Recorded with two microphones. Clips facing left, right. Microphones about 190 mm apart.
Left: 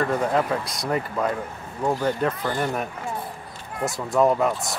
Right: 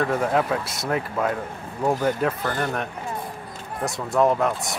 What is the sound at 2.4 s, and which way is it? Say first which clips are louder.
Speech: even; 5° left (ahead or behind).